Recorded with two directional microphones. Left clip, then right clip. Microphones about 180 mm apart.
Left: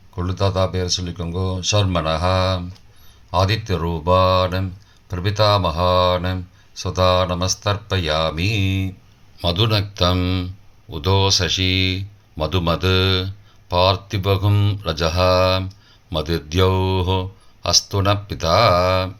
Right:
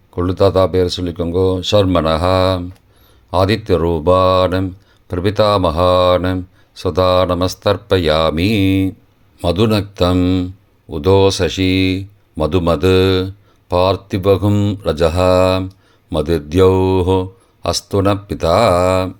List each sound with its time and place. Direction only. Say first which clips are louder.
0.1 s speech: right 9 dB; 45° right (ahead or behind)